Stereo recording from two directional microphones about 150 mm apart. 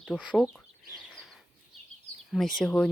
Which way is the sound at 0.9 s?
Centre (ahead or behind).